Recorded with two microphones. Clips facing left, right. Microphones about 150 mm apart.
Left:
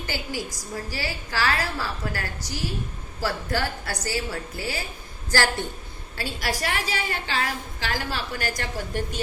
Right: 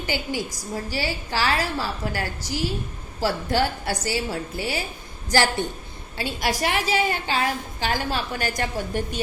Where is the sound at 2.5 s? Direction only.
90° right.